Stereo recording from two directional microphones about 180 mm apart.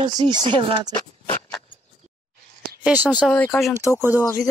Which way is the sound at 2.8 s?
10° right (ahead or behind).